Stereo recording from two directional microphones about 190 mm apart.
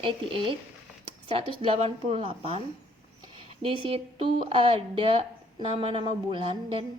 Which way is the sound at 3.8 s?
30° right (ahead or behind).